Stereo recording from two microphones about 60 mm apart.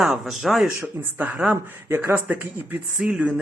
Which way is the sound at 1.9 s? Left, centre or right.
Right.